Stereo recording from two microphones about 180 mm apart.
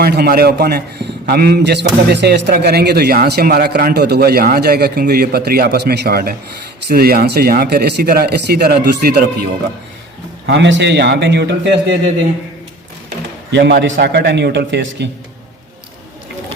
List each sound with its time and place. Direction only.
0.0 s a man's voice: 60° right (ahead or behind)
10.4 s a man's voice: 75° right (ahead or behind)
13.5 s a man's voice: 70° right (ahead or behind)